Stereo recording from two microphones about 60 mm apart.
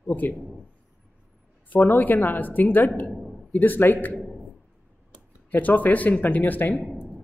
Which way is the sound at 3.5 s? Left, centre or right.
Left.